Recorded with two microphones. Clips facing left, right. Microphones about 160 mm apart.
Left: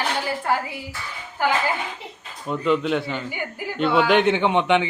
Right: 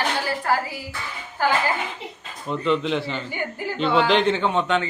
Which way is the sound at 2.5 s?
5° left (ahead or behind).